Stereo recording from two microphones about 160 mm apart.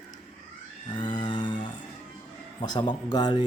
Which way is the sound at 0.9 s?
30° left (ahead or behind).